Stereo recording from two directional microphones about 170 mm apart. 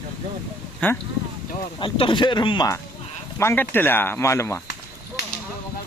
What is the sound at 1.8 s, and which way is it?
Speech, 30° left (ahead or behind).